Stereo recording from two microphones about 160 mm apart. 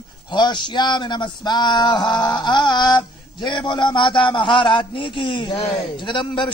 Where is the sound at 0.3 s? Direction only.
30° left (ahead or behind).